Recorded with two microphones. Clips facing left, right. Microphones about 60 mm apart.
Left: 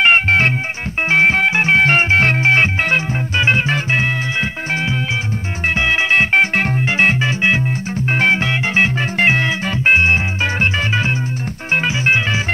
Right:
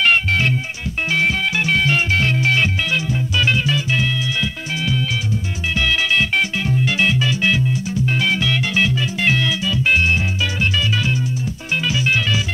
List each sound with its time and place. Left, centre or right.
0.0 s music: left
6.5 s music: left
6.8 s organ: left
11.9 s music: left